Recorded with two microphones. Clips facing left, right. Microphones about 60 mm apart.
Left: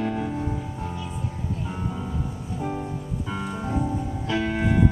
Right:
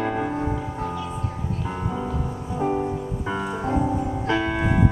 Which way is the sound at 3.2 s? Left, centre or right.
Right.